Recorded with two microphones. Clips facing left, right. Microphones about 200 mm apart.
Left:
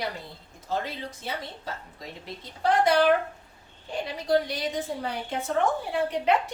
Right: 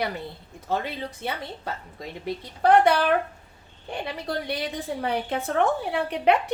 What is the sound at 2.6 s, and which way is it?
Speech, 60° right (ahead or behind).